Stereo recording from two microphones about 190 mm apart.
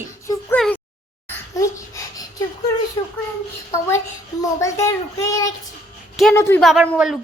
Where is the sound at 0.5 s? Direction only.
5° left (ahead or behind).